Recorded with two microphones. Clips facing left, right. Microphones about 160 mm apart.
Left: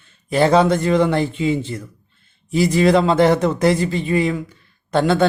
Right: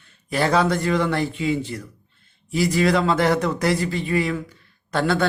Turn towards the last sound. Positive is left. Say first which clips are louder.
# left 5 dB
turn(degrees=20)  # may be behind; listen again after turning